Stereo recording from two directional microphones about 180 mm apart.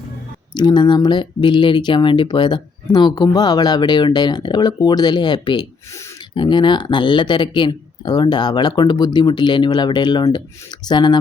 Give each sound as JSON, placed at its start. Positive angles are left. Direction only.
{"t": 0.5, "sound": "speech", "side_deg": 25}